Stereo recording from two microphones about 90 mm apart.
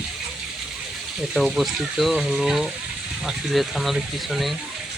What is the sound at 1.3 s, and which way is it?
Speech, centre (ahead or behind).